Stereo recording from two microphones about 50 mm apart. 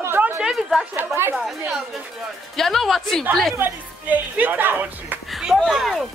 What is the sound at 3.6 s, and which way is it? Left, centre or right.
Speech, right.